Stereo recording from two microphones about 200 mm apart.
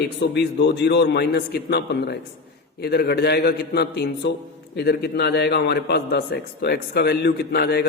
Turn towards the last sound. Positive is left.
turn(degrees=50)  # may be behind; listen again after turning